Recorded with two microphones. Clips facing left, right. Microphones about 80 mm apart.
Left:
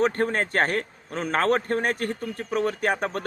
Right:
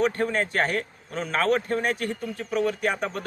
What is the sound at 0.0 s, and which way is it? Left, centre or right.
A man's voice, left.